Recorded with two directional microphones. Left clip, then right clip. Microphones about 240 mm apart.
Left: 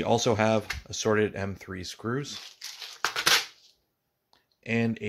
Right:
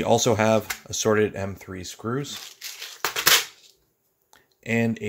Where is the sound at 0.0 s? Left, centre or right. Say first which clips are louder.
Right 4 dB; centre.